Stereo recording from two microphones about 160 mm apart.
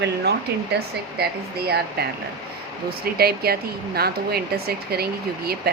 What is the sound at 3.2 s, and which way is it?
Speech, 75° right (ahead or behind).